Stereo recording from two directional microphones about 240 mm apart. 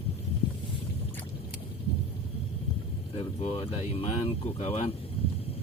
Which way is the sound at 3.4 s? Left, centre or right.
Left.